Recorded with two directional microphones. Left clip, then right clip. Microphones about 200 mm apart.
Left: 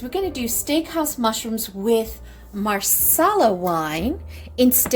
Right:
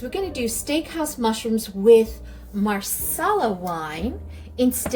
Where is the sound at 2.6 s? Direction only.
50° left (ahead or behind).